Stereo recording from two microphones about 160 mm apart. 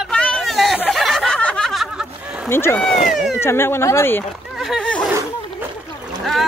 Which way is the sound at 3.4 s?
15° left (ahead or behind).